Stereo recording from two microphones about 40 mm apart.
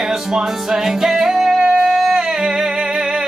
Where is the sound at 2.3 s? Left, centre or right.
Centre.